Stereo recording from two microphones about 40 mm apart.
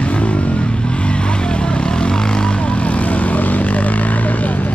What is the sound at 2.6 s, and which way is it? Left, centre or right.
Vehicle, left.